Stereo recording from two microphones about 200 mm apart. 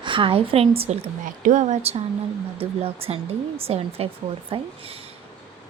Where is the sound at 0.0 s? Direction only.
25° right (ahead or behind).